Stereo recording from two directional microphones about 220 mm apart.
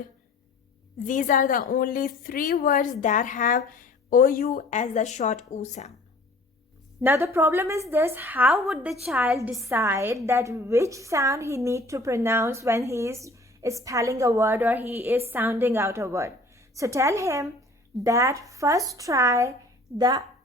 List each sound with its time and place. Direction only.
1.0 s a woman's voice: 35° left (ahead or behind)
7.0 s a woman's voice: 10° right (ahead or behind)